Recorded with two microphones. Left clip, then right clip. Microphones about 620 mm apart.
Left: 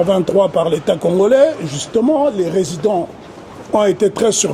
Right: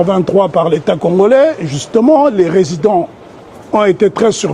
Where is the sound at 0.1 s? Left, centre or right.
Right.